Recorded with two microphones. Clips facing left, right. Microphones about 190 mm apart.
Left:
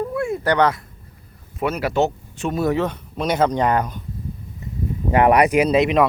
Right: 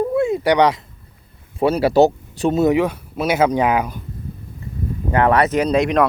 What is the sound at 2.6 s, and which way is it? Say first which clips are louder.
Speech: right 3 dB; 15° right (ahead or behind).